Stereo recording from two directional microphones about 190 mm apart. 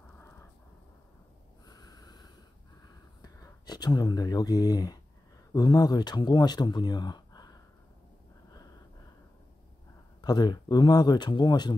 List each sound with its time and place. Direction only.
1.7 s snort: 20° left (ahead or behind)
3.2 s speech: 20° left (ahead or behind)
10.2 s speech: 20° left (ahead or behind)